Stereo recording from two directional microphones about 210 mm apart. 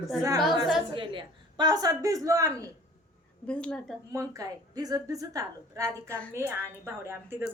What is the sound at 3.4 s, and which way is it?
Speech, 5° left (ahead or behind).